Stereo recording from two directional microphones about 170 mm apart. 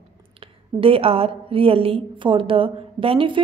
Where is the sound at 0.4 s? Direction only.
30° right (ahead or behind).